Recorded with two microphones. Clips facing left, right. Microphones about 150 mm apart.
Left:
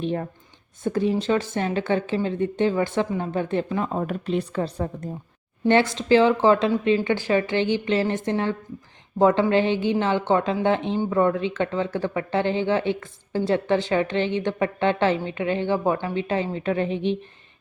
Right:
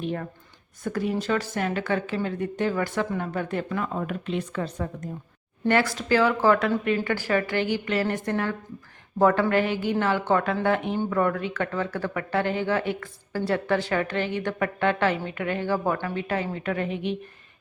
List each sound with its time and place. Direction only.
0.0 s speech: 30° left (ahead or behind)